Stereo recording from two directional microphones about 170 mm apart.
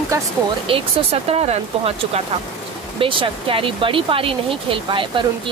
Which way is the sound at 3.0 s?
30° right (ahead or behind).